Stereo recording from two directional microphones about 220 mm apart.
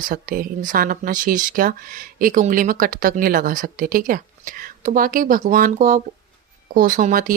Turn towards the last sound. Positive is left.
turn(degrees=-40)  # may be behind; listen again after turning